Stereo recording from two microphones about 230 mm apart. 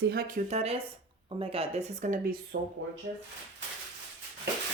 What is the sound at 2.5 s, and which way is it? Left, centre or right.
Speech, right.